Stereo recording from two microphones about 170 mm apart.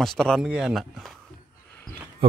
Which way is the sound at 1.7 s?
15° left (ahead or behind).